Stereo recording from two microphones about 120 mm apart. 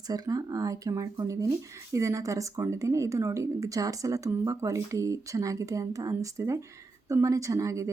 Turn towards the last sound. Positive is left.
turn(degrees=-25)  # may be behind; listen again after turning